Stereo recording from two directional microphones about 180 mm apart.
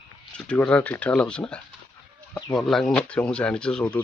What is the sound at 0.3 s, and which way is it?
Speech, 5° left (ahead or behind).